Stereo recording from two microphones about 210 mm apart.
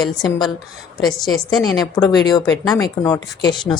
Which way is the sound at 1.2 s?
20° left (ahead or behind).